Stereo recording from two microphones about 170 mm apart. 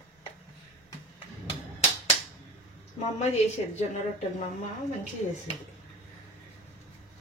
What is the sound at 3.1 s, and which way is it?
Speech, 40° left (ahead or behind).